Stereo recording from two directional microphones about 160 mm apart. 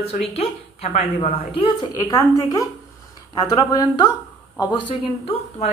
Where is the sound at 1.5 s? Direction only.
30° left (ahead or behind).